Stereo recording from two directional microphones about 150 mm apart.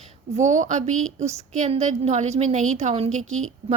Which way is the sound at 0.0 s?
50° right (ahead or behind).